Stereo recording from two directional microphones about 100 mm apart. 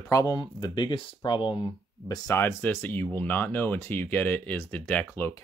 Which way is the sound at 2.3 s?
20° left (ahead or behind).